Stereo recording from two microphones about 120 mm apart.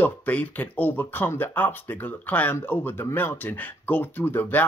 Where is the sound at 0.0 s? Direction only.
15° left (ahead or behind).